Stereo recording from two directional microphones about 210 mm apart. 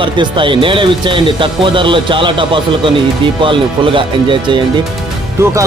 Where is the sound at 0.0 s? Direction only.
25° right (ahead or behind).